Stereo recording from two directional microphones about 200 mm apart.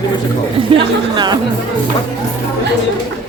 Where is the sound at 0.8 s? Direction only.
20° right (ahead or behind).